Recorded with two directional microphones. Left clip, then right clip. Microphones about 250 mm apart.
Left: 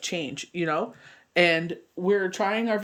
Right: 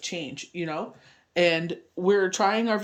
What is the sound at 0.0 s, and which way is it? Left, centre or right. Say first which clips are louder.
Speech: left 3 dB; centre.